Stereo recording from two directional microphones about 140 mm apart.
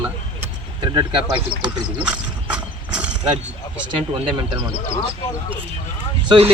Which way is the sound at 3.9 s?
35° right (ahead or behind).